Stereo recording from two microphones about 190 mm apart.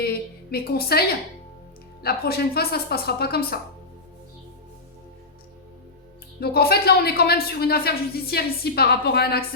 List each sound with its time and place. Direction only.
0.0 s a woman's voice: 55° left (ahead or behind)
6.4 s speech: 55° left (ahead or behind)